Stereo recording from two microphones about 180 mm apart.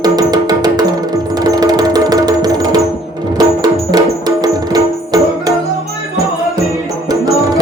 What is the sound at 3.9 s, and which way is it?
Music, 20° right (ahead or behind).